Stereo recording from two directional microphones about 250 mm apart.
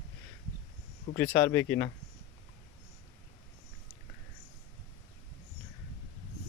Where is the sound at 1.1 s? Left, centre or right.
Centre.